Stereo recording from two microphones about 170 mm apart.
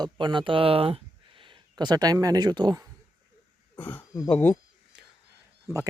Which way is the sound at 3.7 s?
10° left (ahead or behind).